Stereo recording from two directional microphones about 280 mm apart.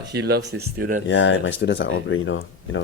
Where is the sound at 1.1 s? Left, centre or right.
Left.